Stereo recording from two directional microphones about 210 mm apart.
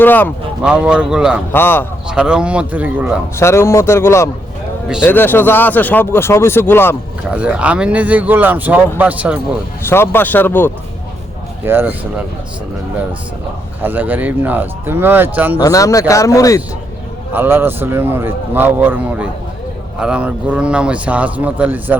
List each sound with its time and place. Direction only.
0.0 s speech: 10° left (ahead or behind)
0.6 s a man's voice: 5° right (ahead or behind)
1.5 s speech: 10° left (ahead or behind)
2.0 s a man's voice: 5° right (ahead or behind)
3.3 s speech: 15° left (ahead or behind)
7.3 s speech: 5° right (ahead or behind)
9.8 s speech: 10° left (ahead or behind)
11.6 s speech: 10° right (ahead or behind)
13.8 s speech: 10° right (ahead or behind)
15.6 s speech: 15° left (ahead or behind)
17.3 s speech: 10° right (ahead or behind)